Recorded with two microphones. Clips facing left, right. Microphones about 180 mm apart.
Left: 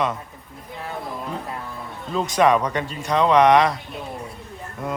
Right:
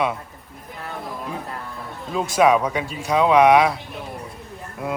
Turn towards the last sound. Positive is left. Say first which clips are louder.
# right 1 dB
turn(degrees=-5)  # may be behind; listen again after turning